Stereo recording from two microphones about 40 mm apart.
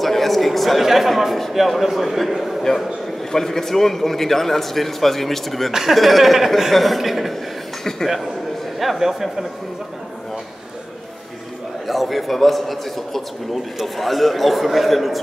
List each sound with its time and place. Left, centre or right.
0.0 s a man's voice: centre
2.7 s a man's voice: centre
5.7 s a man's voice: centre
8.7 s a man's voice: centre
11.9 s a man's voice: centre